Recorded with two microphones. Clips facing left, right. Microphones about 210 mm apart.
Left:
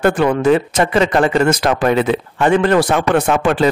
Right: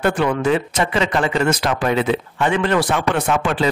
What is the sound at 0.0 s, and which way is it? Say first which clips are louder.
Speech: left 4 dB; 45° left (ahead or behind).